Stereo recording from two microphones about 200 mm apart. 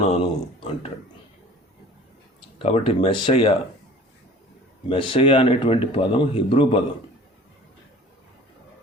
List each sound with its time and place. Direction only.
0.0 s speech: 25° left (ahead or behind)
2.6 s a man's voice: 30° left (ahead or behind)
4.9 s a man's voice: 25° left (ahead or behind)